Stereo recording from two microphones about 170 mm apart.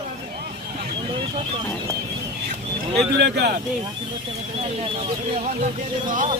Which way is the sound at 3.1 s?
70° right (ahead or behind).